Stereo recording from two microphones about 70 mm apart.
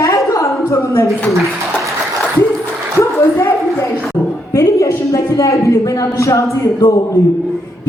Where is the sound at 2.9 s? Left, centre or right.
Left.